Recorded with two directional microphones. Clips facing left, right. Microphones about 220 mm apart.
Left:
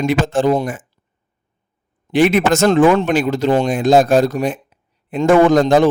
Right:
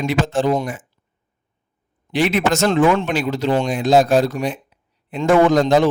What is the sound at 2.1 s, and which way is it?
A man's voice, 50° left (ahead or behind).